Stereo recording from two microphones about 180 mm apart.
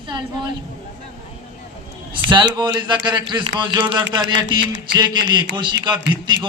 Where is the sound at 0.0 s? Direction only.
25° right (ahead or behind).